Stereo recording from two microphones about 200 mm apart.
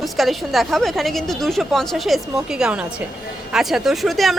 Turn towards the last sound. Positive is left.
turn(degrees=0)  # may be behind; listen again after turning